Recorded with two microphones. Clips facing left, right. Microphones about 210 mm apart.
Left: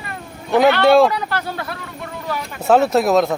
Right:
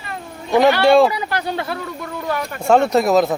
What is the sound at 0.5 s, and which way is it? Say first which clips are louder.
Speech: even; 15° right (ahead or behind).